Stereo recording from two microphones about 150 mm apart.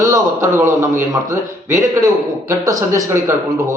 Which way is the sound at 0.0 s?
20° right (ahead or behind).